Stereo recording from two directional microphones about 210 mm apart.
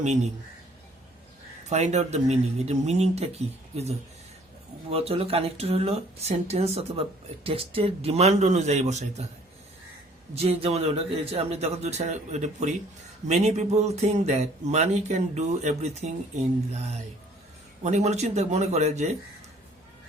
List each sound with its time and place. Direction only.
0.0 s speech: 35° right (ahead or behind)
1.7 s a man's voice: 30° right (ahead or behind)
10.3 s a man's voice: 30° right (ahead or behind)